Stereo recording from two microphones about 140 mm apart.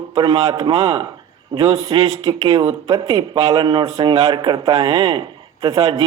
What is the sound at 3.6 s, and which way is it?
Mantra, 35° right (ahead or behind).